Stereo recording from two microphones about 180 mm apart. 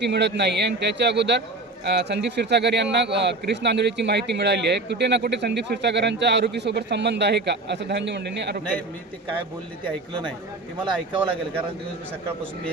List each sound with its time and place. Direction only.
0.0 s speech: 70° right (ahead or behind)